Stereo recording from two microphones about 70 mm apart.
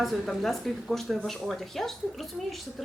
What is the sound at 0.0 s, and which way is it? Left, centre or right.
Speech, centre.